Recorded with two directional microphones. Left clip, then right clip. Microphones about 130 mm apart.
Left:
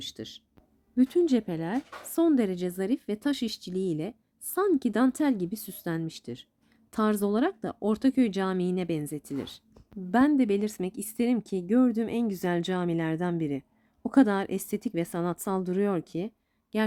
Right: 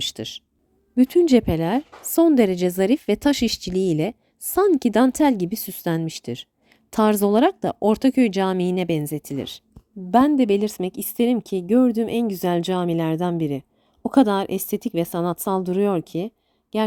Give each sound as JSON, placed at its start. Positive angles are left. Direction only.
{"t": 0.0, "sound": "speech", "side_deg": -85}
{"t": 0.9, "sound": "speech", "side_deg": -50}
{"t": 10.1, "sound": "speech", "side_deg": -35}